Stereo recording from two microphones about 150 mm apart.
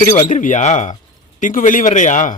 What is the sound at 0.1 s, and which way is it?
Speech, 50° left (ahead or behind).